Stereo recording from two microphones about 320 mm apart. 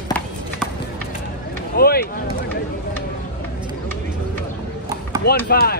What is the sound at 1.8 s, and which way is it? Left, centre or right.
Speech, left.